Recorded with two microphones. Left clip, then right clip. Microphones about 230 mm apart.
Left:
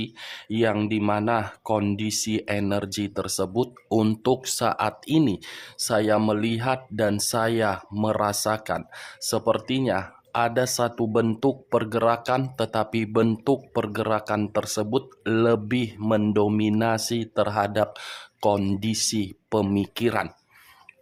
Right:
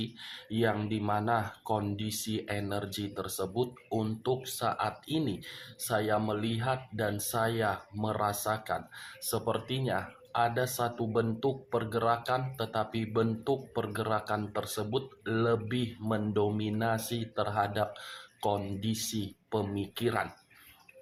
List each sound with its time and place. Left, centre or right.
0.0 s speech: left